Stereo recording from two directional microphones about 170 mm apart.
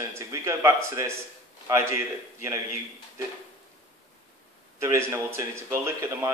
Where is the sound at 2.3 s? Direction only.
20° right (ahead or behind).